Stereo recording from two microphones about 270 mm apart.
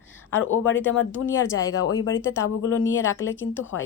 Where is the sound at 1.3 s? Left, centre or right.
Centre.